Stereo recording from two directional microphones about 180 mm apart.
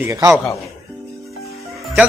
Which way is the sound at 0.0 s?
15° right (ahead or behind).